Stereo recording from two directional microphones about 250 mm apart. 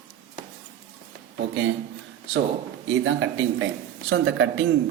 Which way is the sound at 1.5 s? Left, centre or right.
Right.